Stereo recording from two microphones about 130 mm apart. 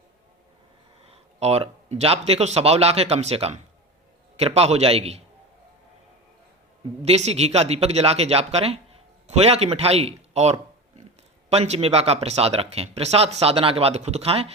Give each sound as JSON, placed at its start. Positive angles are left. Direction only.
{"t": 1.0, "sound": "speech", "side_deg": -50}
{"t": 7.0, "sound": "speech", "side_deg": -55}